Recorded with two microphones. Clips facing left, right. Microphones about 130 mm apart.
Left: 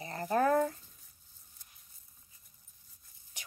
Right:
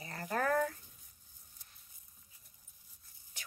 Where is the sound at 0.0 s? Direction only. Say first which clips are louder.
Left 6 dB; 25° left (ahead or behind).